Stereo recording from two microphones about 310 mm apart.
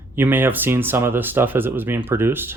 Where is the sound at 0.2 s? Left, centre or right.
Centre.